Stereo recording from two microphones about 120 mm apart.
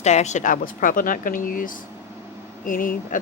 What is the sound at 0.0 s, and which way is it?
Speech, 70° left (ahead or behind).